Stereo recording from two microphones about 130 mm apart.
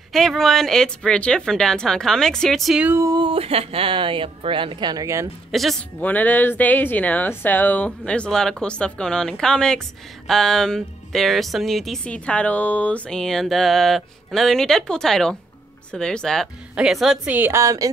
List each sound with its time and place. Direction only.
0.1 s speech: centre (ahead or behind)
2.8 s a woman's voice: 15° right (ahead or behind)
3.1 s speech: 40° right (ahead or behind); by 5.3 s 25° right (ahead or behind)
5.5 s speech: centre (ahead or behind)
5.9 s a woman's voice: 10° left (ahead or behind); by 17.8 s 25° right (ahead or behind)